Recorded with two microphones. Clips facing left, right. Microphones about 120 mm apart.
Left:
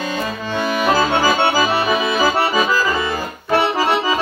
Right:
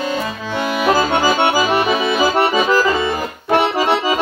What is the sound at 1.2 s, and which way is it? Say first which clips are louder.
Accordion: right 1 dB; 20° right (ahead or behind).